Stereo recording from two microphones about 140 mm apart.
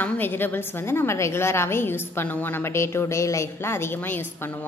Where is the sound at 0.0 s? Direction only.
15° left (ahead or behind).